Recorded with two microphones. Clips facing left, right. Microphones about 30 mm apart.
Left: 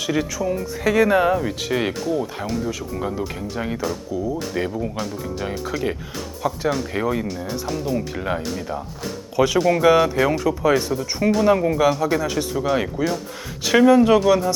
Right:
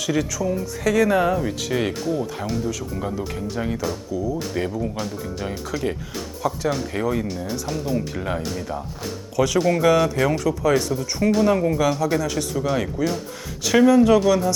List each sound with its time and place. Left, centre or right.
0.0 s speech: centre
9.3 s speech: left